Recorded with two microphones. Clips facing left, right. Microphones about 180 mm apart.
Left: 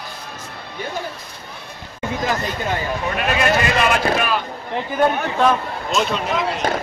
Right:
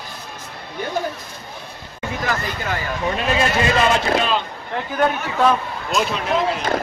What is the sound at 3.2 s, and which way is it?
Speech, 25° right (ahead or behind).